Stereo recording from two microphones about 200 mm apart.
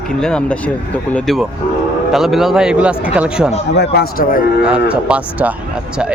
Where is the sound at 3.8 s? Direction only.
50° left (ahead or behind).